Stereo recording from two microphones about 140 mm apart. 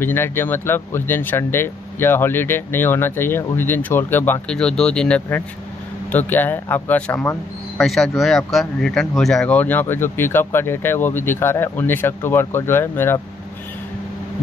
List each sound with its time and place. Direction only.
0.0 s speech: 15° left (ahead or behind)